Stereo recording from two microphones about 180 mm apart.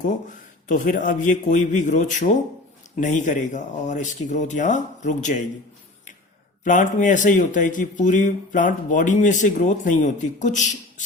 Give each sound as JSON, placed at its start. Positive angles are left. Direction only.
{"t": 0.7, "sound": "speech", "side_deg": 45}
{"t": 6.7, "sound": "speech", "side_deg": 45}